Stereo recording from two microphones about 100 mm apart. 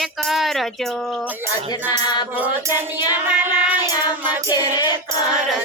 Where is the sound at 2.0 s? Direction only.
45° left (ahead or behind).